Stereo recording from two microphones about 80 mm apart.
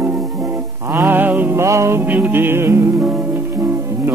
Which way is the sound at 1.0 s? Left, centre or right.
Right.